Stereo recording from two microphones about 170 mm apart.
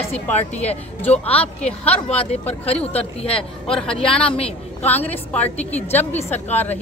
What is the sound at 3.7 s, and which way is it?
A woman's voice, 5° left (ahead or behind).